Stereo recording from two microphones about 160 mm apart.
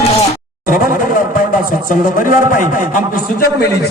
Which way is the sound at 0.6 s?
55° left (ahead or behind).